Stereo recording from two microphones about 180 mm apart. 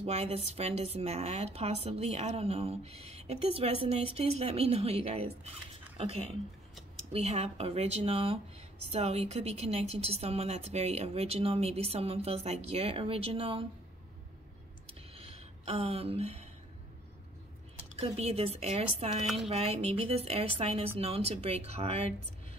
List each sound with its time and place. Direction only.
0.0 s a woman's voice: 35° right (ahead or behind)
15.1 s a sound: 35° right (ahead or behind)
17.9 s a woman's voice: 35° right (ahead or behind)